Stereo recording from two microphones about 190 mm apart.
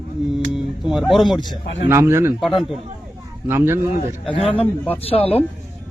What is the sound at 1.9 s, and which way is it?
Speech, 15° right (ahead or behind).